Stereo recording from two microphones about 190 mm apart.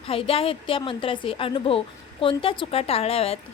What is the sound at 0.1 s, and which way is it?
Speech, 30° left (ahead or behind).